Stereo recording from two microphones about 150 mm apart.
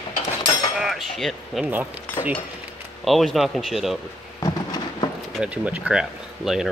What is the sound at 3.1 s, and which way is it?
Speech, centre (ahead or behind).